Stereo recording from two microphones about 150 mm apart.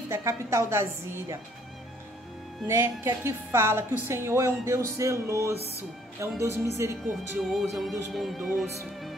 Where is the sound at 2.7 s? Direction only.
15° right (ahead or behind).